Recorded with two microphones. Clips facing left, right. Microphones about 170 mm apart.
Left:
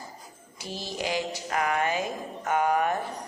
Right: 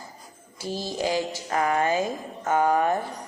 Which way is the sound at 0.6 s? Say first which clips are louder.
Right 5 dB; 30° right (ahead or behind).